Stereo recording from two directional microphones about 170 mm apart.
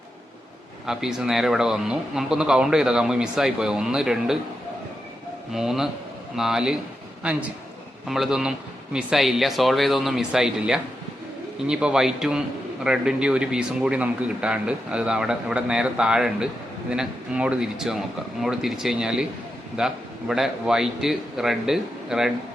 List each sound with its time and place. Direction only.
0.9 s speech: 5° right (ahead or behind)
5.5 s a man's voice: centre (ahead or behind)